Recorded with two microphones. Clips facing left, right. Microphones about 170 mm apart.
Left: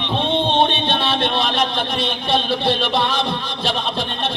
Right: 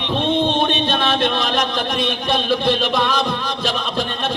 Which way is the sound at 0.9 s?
45° right (ahead or behind).